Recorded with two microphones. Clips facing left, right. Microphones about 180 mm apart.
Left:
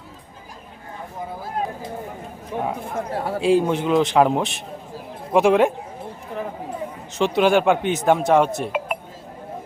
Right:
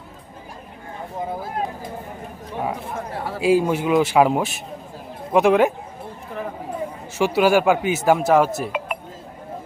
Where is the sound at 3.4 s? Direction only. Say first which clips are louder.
Right 1 dB; 5° right (ahead or behind).